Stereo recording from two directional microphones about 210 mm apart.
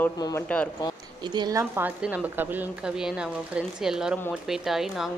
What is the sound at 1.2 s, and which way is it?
A woman's voice, 20° right (ahead or behind).